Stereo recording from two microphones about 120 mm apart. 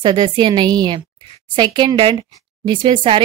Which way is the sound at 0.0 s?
40° right (ahead or behind).